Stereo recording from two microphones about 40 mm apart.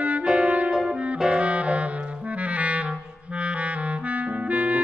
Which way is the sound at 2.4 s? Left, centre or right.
Right.